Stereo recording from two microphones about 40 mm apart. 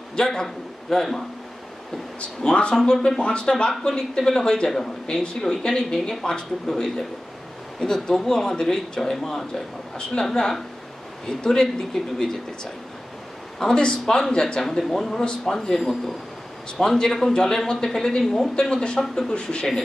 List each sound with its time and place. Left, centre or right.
0.1 s a man's voice: centre
2.4 s speech: left
2.7 s speech: centre
8.1 s speech: centre
10.2 s speech: centre
13.7 s speech: centre
14.6 s speech: centre